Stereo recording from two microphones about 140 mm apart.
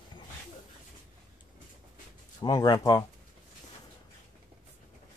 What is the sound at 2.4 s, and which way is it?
Speech, 30° left (ahead or behind).